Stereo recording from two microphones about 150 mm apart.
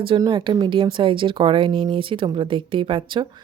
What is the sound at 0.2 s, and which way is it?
Speech, 30° right (ahead or behind).